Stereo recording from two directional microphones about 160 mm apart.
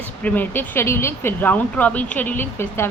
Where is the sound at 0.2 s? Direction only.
10° left (ahead or behind).